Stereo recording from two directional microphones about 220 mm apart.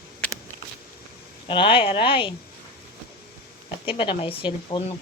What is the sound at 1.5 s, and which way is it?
Speech, 25° left (ahead or behind).